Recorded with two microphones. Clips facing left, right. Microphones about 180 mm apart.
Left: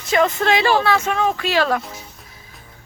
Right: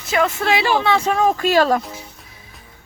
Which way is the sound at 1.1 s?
40° right (ahead or behind).